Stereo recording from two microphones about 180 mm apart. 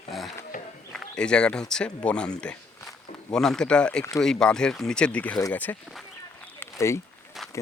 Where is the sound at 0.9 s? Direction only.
5° left (ahead or behind).